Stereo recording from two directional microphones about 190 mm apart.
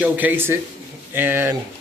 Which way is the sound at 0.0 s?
10° right (ahead or behind).